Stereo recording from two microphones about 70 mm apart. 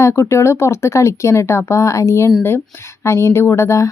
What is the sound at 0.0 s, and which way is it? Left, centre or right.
A woman's voice, left.